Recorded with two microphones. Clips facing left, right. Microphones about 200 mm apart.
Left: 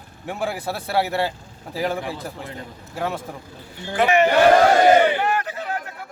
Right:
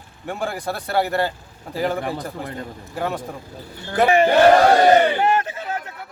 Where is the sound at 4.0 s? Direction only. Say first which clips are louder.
Right 2 dB; 30° right (ahead or behind).